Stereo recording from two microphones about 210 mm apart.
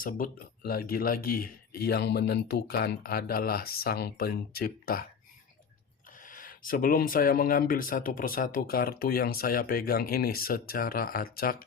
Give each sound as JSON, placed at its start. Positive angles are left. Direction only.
{"t": 0.0, "sound": "speech", "side_deg": 40}
{"t": 6.2, "sound": "speech", "side_deg": 40}